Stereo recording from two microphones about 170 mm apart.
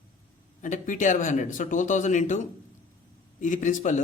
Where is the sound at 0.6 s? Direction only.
50° left (ahead or behind).